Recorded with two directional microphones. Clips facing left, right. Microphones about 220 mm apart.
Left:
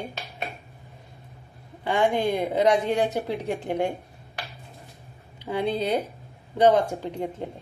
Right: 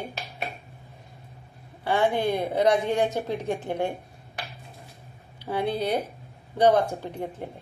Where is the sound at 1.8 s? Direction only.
15° left (ahead or behind).